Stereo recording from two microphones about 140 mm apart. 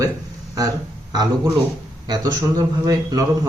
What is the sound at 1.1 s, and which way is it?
A man's voice, 30° right (ahead or behind).